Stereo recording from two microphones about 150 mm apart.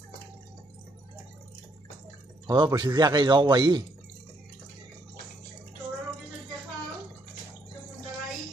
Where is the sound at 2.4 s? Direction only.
30° right (ahead or behind).